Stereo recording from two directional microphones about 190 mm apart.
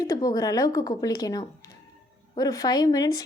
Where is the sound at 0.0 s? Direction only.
20° left (ahead or behind).